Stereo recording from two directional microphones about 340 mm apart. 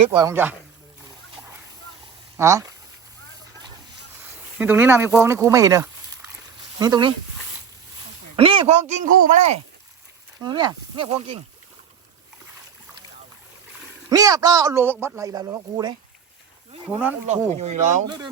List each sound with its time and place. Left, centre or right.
0.0 s speech: centre
2.4 s speech: centre
4.3 s speech: centre
8.4 s speech: centre
9.0 s speech: right
10.4 s speech: centre
14.1 s speech: centre
17.6 s speech: right